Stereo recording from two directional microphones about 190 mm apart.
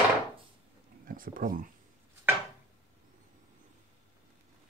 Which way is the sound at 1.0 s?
45° right (ahead or behind).